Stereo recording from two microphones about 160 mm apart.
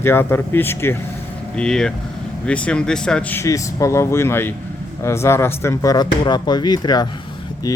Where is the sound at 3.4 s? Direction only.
20° left (ahead or behind).